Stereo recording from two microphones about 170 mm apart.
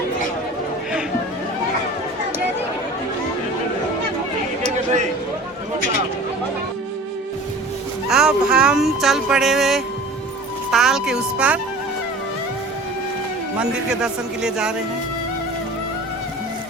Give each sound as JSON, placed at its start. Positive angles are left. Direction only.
{"t": 8.1, "sound": "a man's voice", "side_deg": -5}
{"t": 13.6, "sound": "a man's voice", "side_deg": -5}